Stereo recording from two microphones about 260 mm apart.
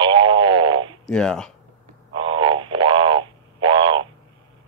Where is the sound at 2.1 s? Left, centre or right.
Centre.